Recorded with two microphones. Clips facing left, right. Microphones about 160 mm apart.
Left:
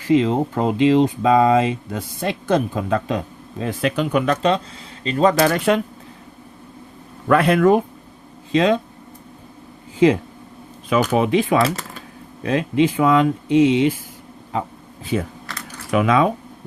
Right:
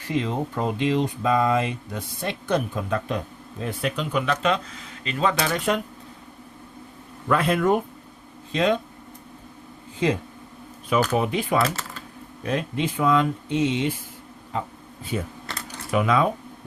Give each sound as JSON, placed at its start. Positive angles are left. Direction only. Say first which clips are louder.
{"t": 0.0, "sound": "speech", "louder": "left 9 dB", "side_deg": 90}
{"t": 4.4, "sound": "speech", "louder": "left 5 dB", "side_deg": 35}
{"t": 5.5, "sound": "speech", "louder": "left 6 dB", "side_deg": 80}
{"t": 7.3, "sound": "speech", "louder": "left 6 dB", "side_deg": 70}
{"t": 10.8, "sound": "speech", "louder": "left 4 dB", "side_deg": 90}
{"t": 15.1, "sound": "speech", "louder": "left 6 dB", "side_deg": 90}